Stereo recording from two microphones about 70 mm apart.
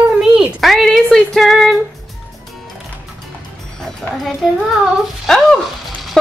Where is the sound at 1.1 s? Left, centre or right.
Centre.